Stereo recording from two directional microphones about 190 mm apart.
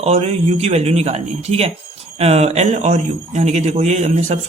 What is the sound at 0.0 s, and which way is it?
A man's voice, 35° right (ahead or behind).